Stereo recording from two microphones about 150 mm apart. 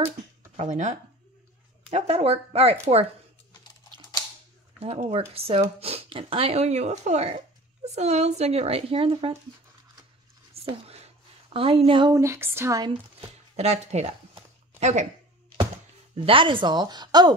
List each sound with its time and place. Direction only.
0.6 s speech: 55° right (ahead or behind)
4.7 s speech: 45° right (ahead or behind)
10.6 s a sound: 40° right (ahead or behind)
11.5 s speech: 40° right (ahead or behind)
12.1 s speech: 20° right (ahead or behind)
13.6 s speech: 45° right (ahead or behind)
16.2 s speech: 35° right (ahead or behind)